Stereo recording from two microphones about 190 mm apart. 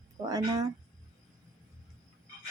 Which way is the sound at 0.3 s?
20° right (ahead or behind).